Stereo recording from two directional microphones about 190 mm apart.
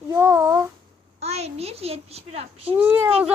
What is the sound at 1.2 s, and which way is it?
A child's voice, 35° right (ahead or behind).